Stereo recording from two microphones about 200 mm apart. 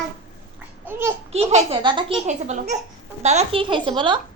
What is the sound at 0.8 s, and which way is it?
Babbling, 10° right (ahead or behind).